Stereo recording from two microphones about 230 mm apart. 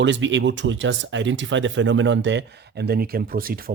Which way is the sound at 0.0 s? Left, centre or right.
Right.